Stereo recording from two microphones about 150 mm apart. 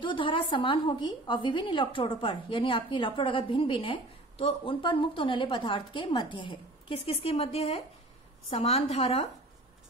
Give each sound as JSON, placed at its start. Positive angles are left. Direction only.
{"t": 0.0, "sound": "a woman's voice", "side_deg": 35}